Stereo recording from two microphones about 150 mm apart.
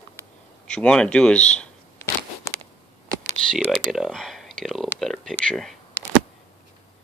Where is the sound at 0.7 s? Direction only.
5° left (ahead or behind).